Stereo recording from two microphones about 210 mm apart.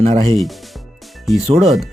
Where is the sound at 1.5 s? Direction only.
30° right (ahead or behind).